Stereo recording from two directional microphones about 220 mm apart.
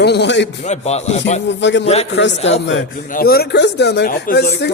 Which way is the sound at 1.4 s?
55° left (ahead or behind).